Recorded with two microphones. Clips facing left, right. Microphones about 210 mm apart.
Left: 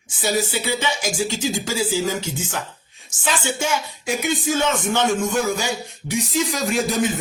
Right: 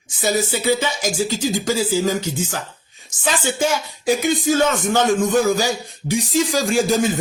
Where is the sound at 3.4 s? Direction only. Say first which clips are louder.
Right 5 dB; 35° right (ahead or behind).